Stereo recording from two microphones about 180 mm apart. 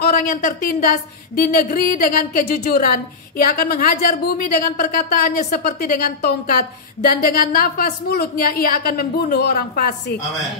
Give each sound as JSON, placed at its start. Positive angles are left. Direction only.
{"t": 0.0, "sound": "a woman's voice", "side_deg": 55}